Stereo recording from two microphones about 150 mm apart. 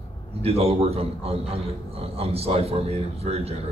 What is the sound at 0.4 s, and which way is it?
A man's voice, 40° right (ahead or behind).